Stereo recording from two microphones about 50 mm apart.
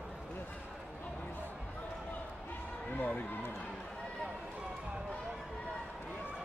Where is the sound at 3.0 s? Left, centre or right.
Left.